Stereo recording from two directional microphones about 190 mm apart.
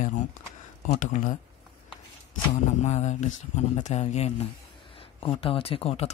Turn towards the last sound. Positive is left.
turn(degrees=30)  # may be behind; listen again after turning